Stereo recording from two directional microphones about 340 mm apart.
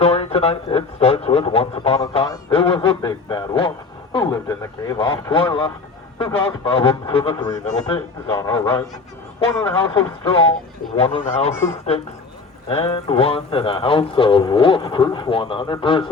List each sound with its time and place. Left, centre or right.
0.0 s speech: centre